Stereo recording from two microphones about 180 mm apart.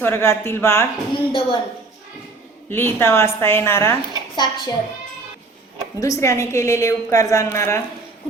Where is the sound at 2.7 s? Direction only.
15° left (ahead or behind).